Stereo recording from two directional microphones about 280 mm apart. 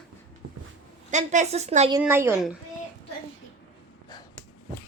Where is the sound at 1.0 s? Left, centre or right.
Right.